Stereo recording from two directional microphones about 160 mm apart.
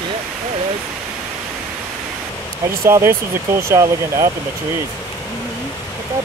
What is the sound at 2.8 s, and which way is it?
Speech, 15° right (ahead or behind).